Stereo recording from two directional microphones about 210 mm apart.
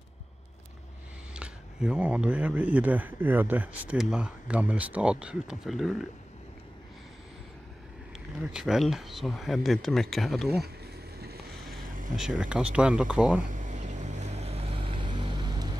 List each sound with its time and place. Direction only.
1.3 s speech: 5° right (ahead or behind)
8.5 s speech: centre (ahead or behind)
12.2 s speech: 5° right (ahead or behind)
13.5 s vehicle: 35° right (ahead or behind); by 15.7 s 20° right (ahead or behind)